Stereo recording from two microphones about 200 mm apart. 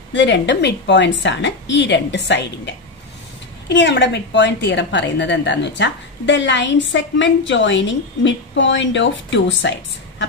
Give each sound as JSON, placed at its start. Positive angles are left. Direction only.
{"t": 0.1, "sound": "a woman's voice", "side_deg": 60}